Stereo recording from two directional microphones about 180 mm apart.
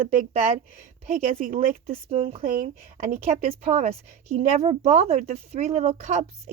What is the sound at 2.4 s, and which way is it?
Speech, 50° right (ahead or behind).